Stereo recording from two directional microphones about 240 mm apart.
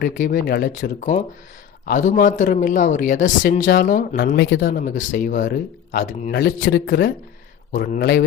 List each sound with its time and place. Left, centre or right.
0.0 s speech: left